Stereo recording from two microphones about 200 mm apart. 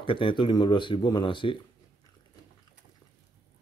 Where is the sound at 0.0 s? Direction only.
25° left (ahead or behind).